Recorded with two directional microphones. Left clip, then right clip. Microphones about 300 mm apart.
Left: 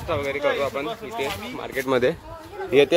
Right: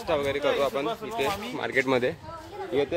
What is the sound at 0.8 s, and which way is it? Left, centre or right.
Speech, right.